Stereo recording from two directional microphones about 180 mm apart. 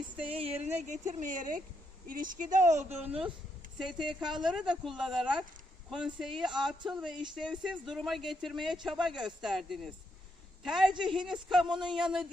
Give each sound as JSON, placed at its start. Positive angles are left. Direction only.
{"t": 0.3, "sound": "a woman's voice", "side_deg": -30}
{"t": 4.0, "sound": "speech", "side_deg": -25}
{"t": 4.4, "sound": "speech", "side_deg": 0}